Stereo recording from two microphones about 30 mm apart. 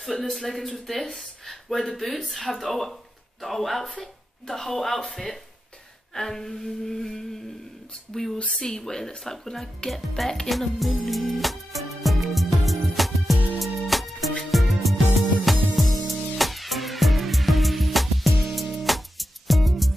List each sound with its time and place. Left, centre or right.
0.0 s speech: centre
11.1 s music: centre